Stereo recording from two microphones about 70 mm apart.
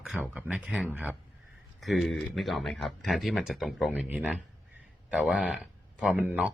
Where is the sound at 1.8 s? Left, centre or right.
Centre.